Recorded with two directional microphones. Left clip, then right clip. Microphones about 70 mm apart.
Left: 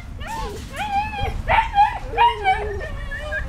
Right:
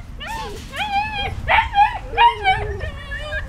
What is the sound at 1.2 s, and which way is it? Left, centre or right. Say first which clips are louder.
Dog: right 2 dB; right.